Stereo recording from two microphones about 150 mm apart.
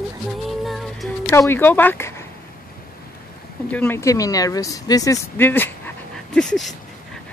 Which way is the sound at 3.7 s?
15° left (ahead or behind).